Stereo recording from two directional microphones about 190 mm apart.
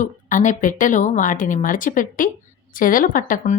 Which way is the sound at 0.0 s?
40° left (ahead or behind).